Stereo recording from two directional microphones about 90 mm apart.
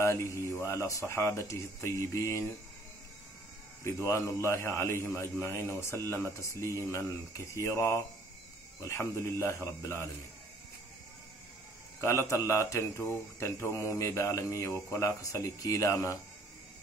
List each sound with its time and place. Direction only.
0.0 s speech: 30° left (ahead or behind)
3.8 s a man's voice: 30° left (ahead or behind)
12.0 s speech: 30° left (ahead or behind)